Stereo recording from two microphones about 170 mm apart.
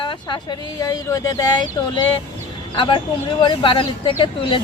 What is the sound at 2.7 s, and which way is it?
Speech, 30° left (ahead or behind).